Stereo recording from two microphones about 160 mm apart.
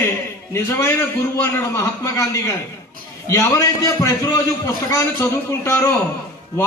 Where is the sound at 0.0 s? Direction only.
15° left (ahead or behind).